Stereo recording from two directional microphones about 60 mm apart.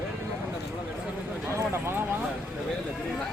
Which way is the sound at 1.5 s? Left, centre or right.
Right.